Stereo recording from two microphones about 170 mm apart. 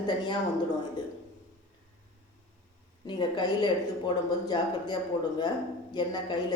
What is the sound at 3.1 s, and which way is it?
Speech, 25° left (ahead or behind).